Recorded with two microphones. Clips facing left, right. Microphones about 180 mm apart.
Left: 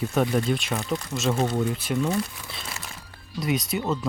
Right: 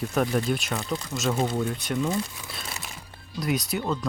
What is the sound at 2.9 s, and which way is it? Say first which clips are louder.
Music: even; 20° right (ahead or behind).